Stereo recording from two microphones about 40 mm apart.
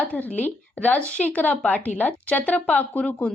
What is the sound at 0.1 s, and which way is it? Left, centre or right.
Speech, left.